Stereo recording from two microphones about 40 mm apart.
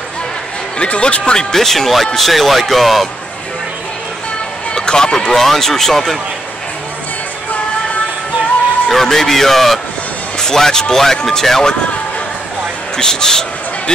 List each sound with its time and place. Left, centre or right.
0.7 s speech: left; by 3.1 s centre
4.7 s speech: centre
5.3 s speech: centre
8.8 s speech: centre
12.9 s speech: centre